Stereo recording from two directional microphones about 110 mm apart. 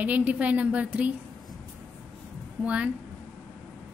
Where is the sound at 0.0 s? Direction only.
15° right (ahead or behind).